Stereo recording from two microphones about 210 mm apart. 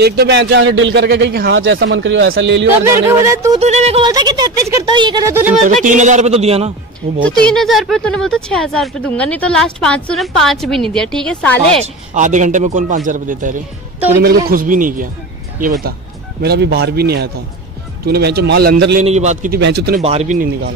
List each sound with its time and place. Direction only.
0.0 s a man's voice: 50° right (ahead or behind)
1.6 s a man's voice: 70° right (ahead or behind)
2.8 s speech: 15° right (ahead or behind)
3.5 s music: 30° right (ahead or behind)
4.1 s speech: 20° right (ahead or behind)
5.7 s speech: 35° right (ahead or behind)
7.4 s speech: centre (ahead or behind)
11.8 s speech: 35° right (ahead or behind)
16.4 s speech: 50° right (ahead or behind)
19.0 s speech: 35° right (ahead or behind)
19.6 s speech: 50° right (ahead or behind)
20.0 s speech: 30° right (ahead or behind)